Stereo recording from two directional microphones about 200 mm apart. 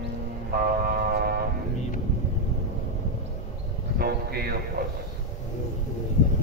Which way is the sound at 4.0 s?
50° right (ahead or behind).